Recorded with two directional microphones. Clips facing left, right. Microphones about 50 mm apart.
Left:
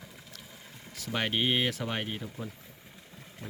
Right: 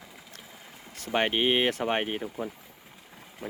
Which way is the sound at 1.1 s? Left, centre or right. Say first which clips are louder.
Right 4 dB; right.